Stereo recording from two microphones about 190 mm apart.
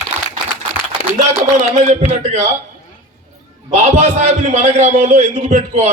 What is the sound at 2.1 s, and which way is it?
Speech, 40° right (ahead or behind).